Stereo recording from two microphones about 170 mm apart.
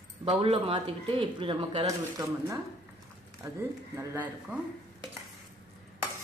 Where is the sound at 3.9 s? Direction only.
15° right (ahead or behind).